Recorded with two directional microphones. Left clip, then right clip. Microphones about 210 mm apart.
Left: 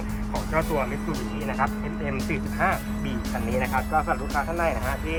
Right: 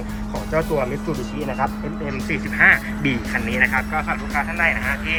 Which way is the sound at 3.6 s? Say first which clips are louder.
Right 9 dB; 15° right (ahead or behind).